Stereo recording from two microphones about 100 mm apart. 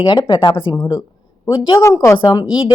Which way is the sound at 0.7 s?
35° left (ahead or behind).